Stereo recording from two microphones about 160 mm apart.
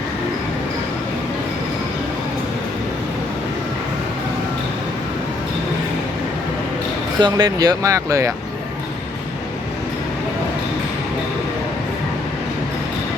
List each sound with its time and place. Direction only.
7.2 s speech: 25° right (ahead or behind)